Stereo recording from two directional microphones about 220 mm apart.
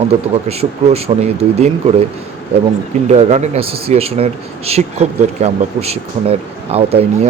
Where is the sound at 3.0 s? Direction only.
30° right (ahead or behind).